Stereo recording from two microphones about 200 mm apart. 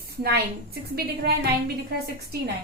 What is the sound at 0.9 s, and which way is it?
Speech, 55° right (ahead or behind).